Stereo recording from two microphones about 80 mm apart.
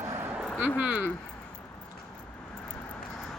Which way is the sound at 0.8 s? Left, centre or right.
Centre.